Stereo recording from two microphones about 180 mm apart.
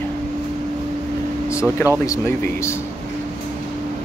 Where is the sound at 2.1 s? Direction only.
15° left (ahead or behind).